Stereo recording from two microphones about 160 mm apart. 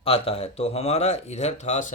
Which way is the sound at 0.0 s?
40° left (ahead or behind).